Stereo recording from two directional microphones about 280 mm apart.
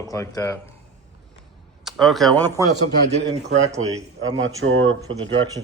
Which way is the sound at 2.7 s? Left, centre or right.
Right.